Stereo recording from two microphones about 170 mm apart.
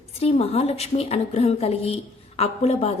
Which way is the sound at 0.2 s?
35° left (ahead or behind).